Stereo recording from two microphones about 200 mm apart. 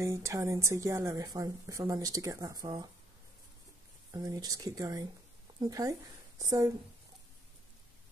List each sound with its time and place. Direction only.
0.0 s a woman's voice: 15° right (ahead or behind)
4.1 s a woman's voice: 20° right (ahead or behind)